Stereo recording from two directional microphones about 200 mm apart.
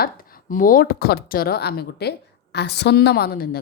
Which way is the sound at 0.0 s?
45° left (ahead or behind).